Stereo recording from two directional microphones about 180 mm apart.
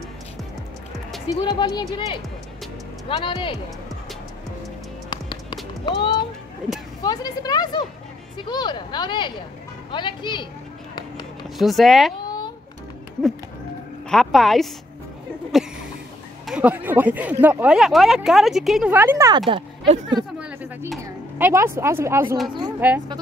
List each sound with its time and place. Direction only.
1.3 s speech: 20° left (ahead or behind)
3.1 s speech: 30° left (ahead or behind)
5.1 s music: 25° left (ahead or behind)
5.9 s speech: 25° left (ahead or behind)
11.4 s speech: centre (ahead or behind)
14.0 s speech: centre (ahead or behind)
15.5 s a sound: centre (ahead or behind)
16.4 s speech: 5° right (ahead or behind)
20.3 s a sound: 10° right (ahead or behind)
21.0 s speech: 15° right (ahead or behind)